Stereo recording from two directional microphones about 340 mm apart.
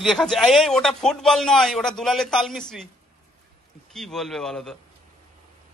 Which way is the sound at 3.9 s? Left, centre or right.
Centre.